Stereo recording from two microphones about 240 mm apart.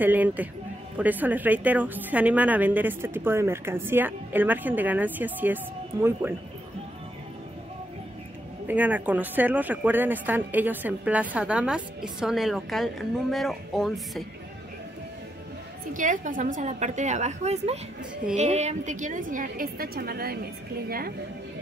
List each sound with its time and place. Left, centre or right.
0.0 s speech: centre
8.6 s speech: centre
15.9 s a woman's voice: right